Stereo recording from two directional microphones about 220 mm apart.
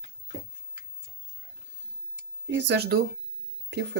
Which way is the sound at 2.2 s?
55° right (ahead or behind).